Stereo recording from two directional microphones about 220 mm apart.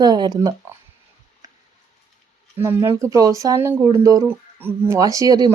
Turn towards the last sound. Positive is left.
turn(degrees=-15)  # may be behind; listen again after turning